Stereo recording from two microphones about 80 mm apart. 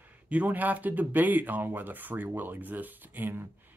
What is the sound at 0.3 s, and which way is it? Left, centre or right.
Speech, centre.